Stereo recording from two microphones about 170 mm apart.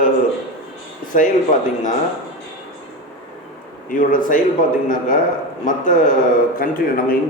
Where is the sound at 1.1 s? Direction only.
50° left (ahead or behind).